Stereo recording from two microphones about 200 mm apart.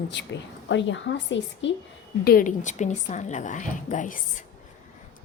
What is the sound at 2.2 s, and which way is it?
A woman's voice, 45° left (ahead or behind).